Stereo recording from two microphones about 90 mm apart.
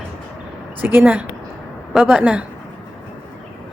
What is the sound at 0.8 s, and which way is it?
Speech, 20° right (ahead or behind).